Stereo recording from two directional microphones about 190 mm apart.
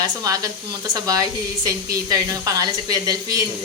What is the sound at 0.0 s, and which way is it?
Speech, 20° right (ahead or behind).